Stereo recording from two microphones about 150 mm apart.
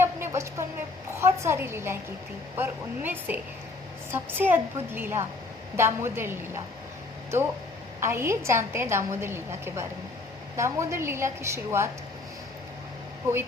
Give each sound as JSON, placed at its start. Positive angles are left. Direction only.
{"t": 0.0, "sound": "a sound", "side_deg": -15}
{"t": 1.1, "sound": "a woman's voice", "side_deg": -20}
{"t": 8.0, "sound": "a woman's voice", "side_deg": -15}